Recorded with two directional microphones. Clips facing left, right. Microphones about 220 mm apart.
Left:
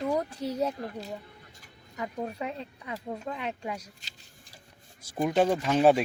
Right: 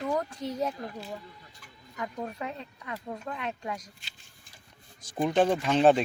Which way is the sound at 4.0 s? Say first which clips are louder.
Left 2 dB; 40° left (ahead or behind).